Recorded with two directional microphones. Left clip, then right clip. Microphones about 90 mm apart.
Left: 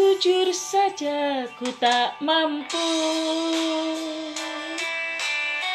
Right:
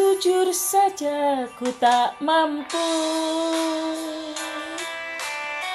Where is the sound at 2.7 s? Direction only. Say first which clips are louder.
Right 1 dB; 35° right (ahead or behind).